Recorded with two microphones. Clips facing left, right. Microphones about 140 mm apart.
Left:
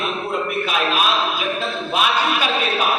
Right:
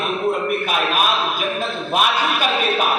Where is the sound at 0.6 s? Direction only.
50° right (ahead or behind).